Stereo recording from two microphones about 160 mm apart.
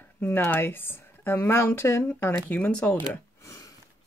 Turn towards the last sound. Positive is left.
turn(degrees=20)  # may be behind; listen again after turning